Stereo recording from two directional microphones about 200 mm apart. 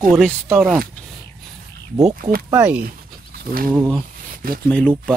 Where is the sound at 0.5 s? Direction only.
Centre (ahead or behind).